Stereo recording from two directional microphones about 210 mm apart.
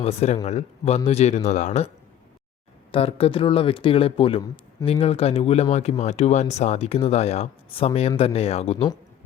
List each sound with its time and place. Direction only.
0.0 s speech: 30° left (ahead or behind)
2.9 s speech: 25° left (ahead or behind)